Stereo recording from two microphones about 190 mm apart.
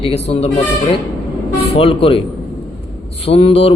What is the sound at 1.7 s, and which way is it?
Speech, 30° left (ahead or behind).